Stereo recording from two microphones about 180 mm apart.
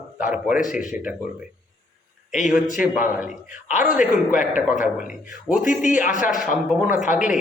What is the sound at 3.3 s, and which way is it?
A man's voice, 45° left (ahead or behind).